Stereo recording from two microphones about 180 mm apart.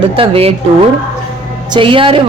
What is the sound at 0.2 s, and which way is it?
Speech, 35° right (ahead or behind).